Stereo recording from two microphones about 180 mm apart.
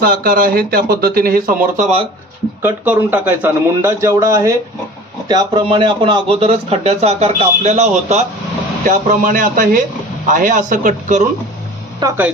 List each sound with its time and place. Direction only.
0.0 s speech: 55° right (ahead or behind)
2.6 s speech: 10° right (ahead or behind); by 11.3 s 45° right (ahead or behind)